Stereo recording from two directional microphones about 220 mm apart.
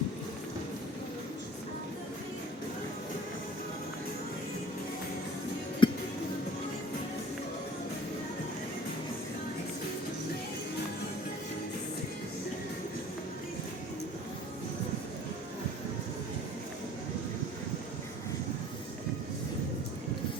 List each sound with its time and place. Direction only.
5.8 s music: 20° left (ahead or behind)